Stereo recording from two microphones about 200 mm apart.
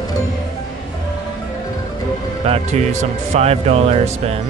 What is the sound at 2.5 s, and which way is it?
Speech, 35° right (ahead or behind).